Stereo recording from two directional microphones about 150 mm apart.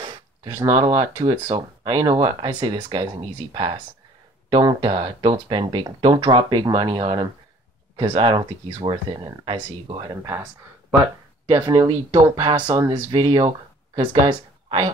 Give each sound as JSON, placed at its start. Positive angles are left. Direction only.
{"t": 0.0, "sound": "a sound", "side_deg": -30}
{"t": 1.0, "sound": "speech", "side_deg": -25}
{"t": 10.2, "sound": "speech", "side_deg": -20}